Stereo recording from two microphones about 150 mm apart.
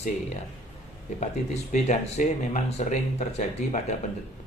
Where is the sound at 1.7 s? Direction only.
50° left (ahead or behind).